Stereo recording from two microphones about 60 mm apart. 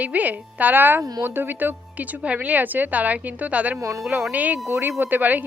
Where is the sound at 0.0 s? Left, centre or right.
Right.